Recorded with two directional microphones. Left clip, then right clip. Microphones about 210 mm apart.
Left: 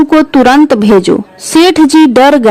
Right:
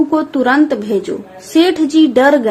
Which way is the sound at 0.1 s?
50° left (ahead or behind).